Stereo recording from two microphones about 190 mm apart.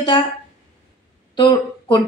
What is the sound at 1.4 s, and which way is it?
Speech, 25° left (ahead or behind).